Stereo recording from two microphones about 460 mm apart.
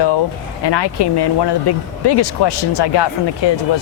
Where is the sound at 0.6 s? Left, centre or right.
Left.